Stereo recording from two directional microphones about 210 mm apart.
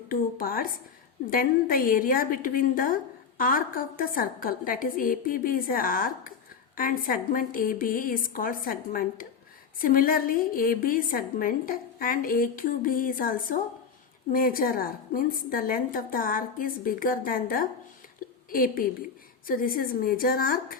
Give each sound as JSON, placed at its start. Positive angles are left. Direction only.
{"t": 0.1, "sound": "a woman's voice", "side_deg": 40}